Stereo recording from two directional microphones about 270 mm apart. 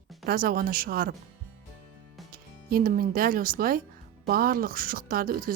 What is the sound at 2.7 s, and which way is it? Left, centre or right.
Speech, right.